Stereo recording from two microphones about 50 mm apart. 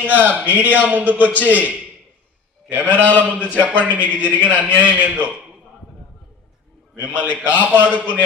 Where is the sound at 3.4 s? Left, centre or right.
Left.